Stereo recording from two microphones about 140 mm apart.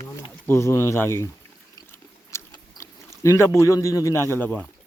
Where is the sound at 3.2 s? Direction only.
20° left (ahead or behind).